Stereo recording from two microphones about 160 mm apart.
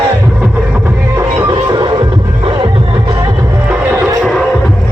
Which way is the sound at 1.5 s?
25° right (ahead or behind).